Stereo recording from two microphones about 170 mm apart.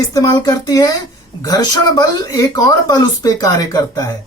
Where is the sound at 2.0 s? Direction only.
20° left (ahead or behind).